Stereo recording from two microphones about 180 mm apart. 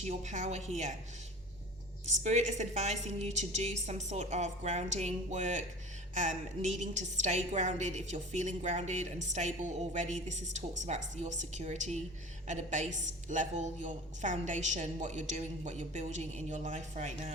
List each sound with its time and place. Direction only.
0.0 s a woman's voice: 40° right (ahead or behind)
2.0 s a woman's voice: 40° right (ahead or behind)